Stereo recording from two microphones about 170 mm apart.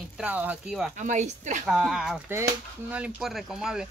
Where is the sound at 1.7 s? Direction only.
Centre (ahead or behind).